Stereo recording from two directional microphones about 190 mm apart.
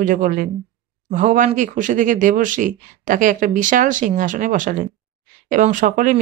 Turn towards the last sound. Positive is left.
turn(degrees=-45)  # may be behind; listen again after turning